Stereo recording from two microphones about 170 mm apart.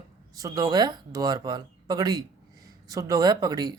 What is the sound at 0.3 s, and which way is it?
Speech, 20° right (ahead or behind).